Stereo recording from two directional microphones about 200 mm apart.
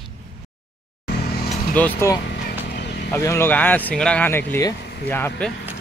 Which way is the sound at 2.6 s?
55° left (ahead or behind).